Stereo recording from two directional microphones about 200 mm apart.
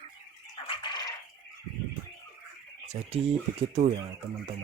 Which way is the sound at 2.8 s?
35° right (ahead or behind).